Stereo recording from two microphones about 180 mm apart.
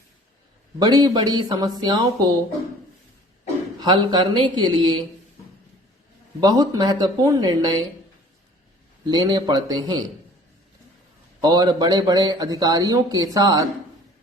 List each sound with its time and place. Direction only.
0.8 s a man's voice: 20° right (ahead or behind)
3.8 s a man's voice: 25° right (ahead or behind)
6.4 s a man's voice: 20° right (ahead or behind)
9.0 s a man's voice: 25° right (ahead or behind)
11.3 s a man's voice: 20° right (ahead or behind)